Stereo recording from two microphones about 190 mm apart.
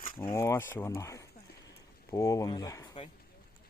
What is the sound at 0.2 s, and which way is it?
Speech, 15° left (ahead or behind).